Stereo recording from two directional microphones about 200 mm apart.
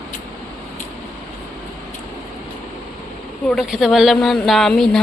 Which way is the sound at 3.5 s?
Centre (ahead or behind).